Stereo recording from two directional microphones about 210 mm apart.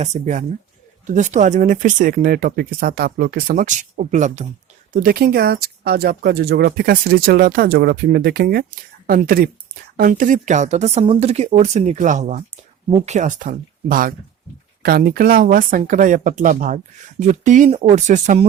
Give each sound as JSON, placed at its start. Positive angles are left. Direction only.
{"t": 0.0, "sound": "speech", "side_deg": -35}